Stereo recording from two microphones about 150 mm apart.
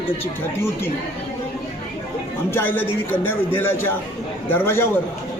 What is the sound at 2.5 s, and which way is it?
Speech, 15° left (ahead or behind).